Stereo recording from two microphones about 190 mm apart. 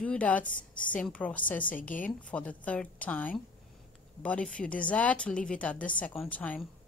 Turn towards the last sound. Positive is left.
turn(degrees=10)  # may be behind; listen again after turning